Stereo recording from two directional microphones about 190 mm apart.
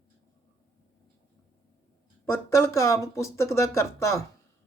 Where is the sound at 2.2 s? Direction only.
15° left (ahead or behind).